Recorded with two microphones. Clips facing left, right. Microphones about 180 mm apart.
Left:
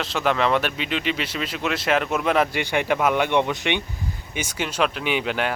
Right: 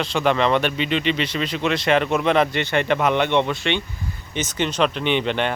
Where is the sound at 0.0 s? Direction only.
Centre (ahead or behind).